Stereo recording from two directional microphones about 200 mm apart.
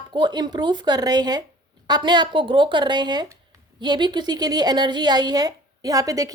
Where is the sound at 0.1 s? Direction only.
20° right (ahead or behind).